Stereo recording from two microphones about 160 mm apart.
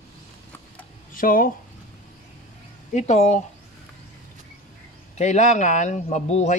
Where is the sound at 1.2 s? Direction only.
60° left (ahead or behind).